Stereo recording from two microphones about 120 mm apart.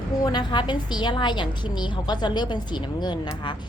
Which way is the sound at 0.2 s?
35° left (ahead or behind).